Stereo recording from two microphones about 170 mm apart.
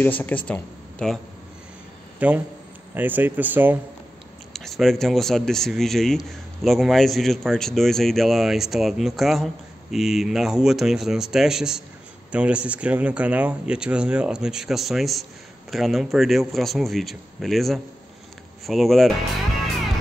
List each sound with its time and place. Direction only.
0.0 s speech: 10° left (ahead or behind)
2.1 s speech: 10° right (ahead or behind)
4.6 s speech: centre (ahead or behind)